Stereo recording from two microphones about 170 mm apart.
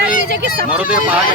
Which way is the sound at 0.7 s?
10° right (ahead or behind).